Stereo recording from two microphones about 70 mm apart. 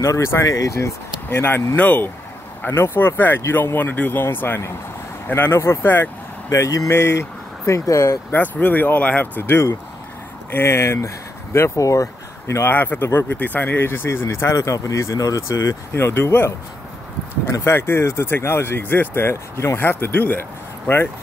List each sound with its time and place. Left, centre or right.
0.0 s speech: left
1.8 s speech: left
2.6 s speech: left
3.7 s speech: left
6.5 s speech: left
6.9 s speech: left
8.3 s speech: left
12.6 s speech: left
16.0 s speech: left